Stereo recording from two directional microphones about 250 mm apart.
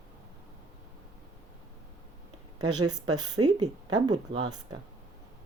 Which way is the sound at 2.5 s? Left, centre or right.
Right.